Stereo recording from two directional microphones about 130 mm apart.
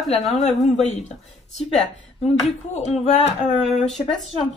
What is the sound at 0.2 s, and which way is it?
Speech, 60° left (ahead or behind).